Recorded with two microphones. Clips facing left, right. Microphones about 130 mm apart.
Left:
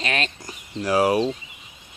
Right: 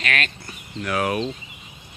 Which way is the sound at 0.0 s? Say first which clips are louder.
Even; 30° left (ahead or behind).